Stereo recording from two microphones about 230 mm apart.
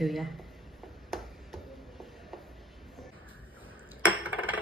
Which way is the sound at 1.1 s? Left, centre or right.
Centre.